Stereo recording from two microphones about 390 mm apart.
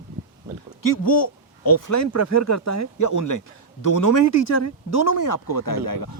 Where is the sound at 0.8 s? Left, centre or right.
Left.